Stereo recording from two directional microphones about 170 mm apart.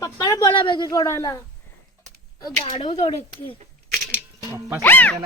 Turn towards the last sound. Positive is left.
turn(degrees=10)  # may be behind; listen again after turning